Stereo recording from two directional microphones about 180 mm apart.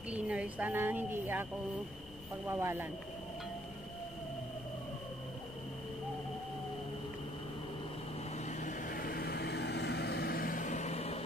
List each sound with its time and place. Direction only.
0.1 s a woman's voice: 5° right (ahead or behind)
8.5 s vehicle: 45° left (ahead or behind)